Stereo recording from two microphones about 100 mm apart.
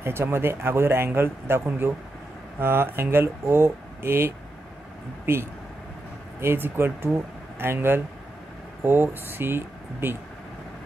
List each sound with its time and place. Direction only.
0.0 s speech: 25° right (ahead or behind)